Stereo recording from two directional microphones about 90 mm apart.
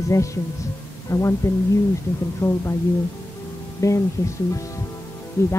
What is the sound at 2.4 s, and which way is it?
Speech, 30° left (ahead or behind).